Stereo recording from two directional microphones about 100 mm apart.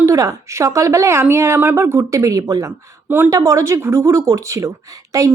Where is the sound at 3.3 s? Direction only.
35° right (ahead or behind).